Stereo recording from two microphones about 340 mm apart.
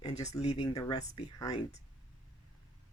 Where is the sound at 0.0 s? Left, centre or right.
Centre.